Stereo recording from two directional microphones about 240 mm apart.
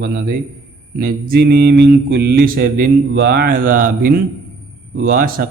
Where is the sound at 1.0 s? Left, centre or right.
Right.